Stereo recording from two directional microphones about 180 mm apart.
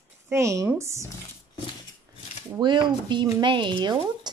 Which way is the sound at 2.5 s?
25° right (ahead or behind).